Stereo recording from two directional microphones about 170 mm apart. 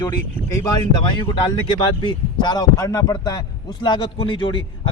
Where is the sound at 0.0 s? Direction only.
20° left (ahead or behind).